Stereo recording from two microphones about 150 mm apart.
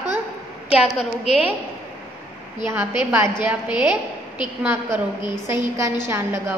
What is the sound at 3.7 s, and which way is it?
Speech, 30° left (ahead or behind).